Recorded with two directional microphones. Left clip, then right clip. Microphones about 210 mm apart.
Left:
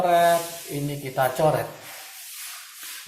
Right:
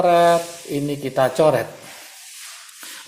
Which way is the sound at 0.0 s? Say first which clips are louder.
Right 4 dB; 50° right (ahead or behind).